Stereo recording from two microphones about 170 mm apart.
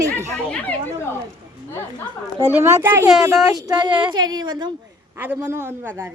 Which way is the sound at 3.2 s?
20° right (ahead or behind).